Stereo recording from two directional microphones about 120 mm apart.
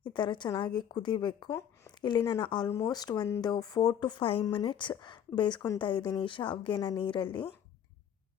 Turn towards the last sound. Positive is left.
turn(degrees=45)  # may be behind; listen again after turning